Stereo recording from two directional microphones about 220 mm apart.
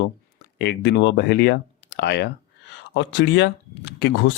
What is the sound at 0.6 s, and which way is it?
Speech, 50° left (ahead or behind).